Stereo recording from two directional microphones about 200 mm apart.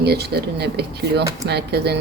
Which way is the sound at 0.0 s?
55° right (ahead or behind).